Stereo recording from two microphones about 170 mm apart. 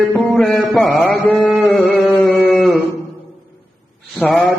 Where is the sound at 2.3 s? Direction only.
Centre (ahead or behind).